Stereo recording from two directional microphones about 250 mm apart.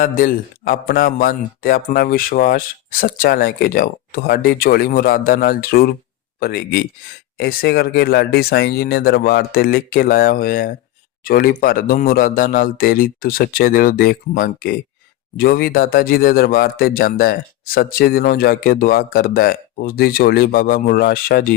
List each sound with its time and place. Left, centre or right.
0.0 s speech: left